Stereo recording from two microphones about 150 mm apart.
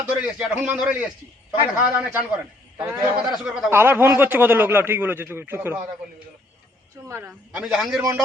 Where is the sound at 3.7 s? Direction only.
15° right (ahead or behind).